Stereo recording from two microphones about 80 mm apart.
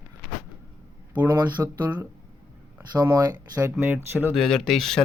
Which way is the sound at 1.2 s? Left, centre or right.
Right.